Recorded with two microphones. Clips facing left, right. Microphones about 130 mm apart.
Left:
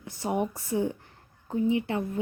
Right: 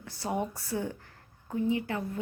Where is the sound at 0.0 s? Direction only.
20° left (ahead or behind).